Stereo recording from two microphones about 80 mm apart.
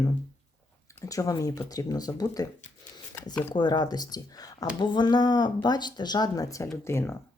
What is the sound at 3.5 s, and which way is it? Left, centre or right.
Speech, left.